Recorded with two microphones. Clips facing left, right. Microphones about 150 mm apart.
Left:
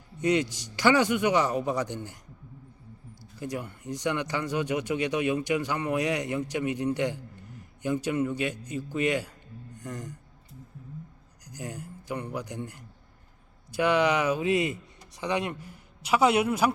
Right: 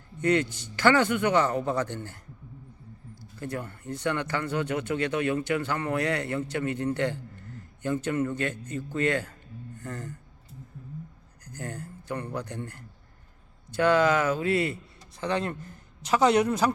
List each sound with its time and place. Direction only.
0.2 s speech: 15° left (ahead or behind)
3.3 s speech: 15° left (ahead or behind)
11.4 s speech: 10° left (ahead or behind)